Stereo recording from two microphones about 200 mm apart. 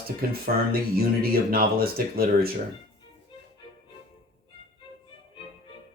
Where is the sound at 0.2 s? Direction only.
50° right (ahead or behind).